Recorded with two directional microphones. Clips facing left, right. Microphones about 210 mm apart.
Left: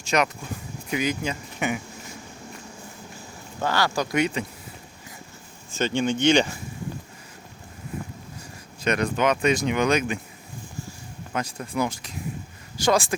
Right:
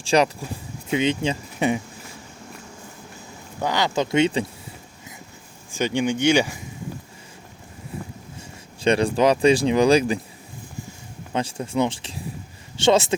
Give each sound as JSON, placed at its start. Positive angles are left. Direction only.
{"t": 0.0, "sound": "speech", "side_deg": -30}
{"t": 3.6, "sound": "speech", "side_deg": -15}
{"t": 5.7, "sound": "speech", "side_deg": -15}
{"t": 8.8, "sound": "speech", "side_deg": -30}
{"t": 11.3, "sound": "speech", "side_deg": -30}